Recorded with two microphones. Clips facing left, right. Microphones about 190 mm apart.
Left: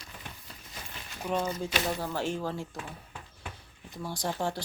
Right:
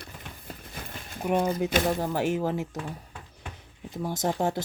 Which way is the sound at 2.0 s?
15° right (ahead or behind).